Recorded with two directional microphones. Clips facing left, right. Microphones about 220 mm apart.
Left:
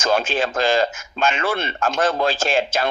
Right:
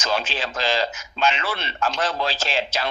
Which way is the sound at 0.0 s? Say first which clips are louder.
Left 6 dB; 45° left (ahead or behind).